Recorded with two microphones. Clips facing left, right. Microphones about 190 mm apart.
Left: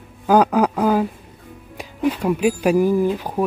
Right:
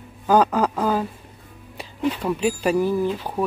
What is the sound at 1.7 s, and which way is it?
Speech, 10° left (ahead or behind).